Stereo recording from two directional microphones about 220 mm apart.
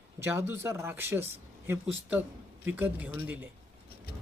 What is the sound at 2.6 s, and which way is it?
Speech, 10° right (ahead or behind).